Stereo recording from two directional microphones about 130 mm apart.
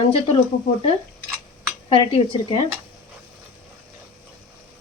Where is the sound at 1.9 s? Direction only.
45° left (ahead or behind).